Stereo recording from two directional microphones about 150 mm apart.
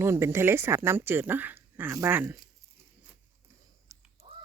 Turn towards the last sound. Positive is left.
turn(degrees=-30)  # may be behind; listen again after turning